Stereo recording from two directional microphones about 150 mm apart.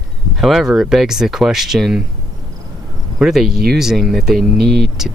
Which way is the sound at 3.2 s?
Centre (ahead or behind).